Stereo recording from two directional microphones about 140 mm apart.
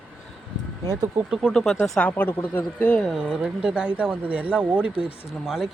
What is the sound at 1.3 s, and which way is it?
Speech, centre (ahead or behind).